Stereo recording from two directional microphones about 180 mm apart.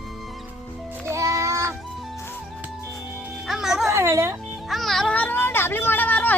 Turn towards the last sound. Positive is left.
turn(degrees=10)  # may be behind; listen again after turning